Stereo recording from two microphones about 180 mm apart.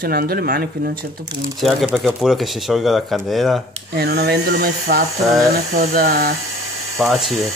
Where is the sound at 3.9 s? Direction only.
60° right (ahead or behind).